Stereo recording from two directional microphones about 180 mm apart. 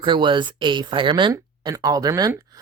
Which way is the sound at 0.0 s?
25° right (ahead or behind).